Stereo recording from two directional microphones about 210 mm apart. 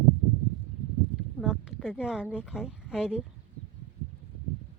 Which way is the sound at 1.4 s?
5° right (ahead or behind).